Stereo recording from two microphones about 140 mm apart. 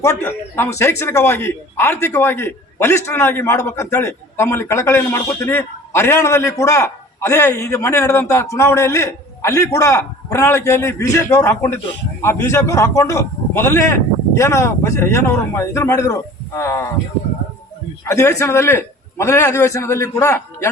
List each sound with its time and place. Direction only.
0.0 s speech: 20° left (ahead or behind)
18.1 s speech: 20° left (ahead or behind)